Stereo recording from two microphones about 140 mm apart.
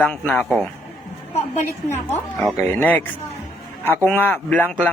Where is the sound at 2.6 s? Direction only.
15° left (ahead or behind).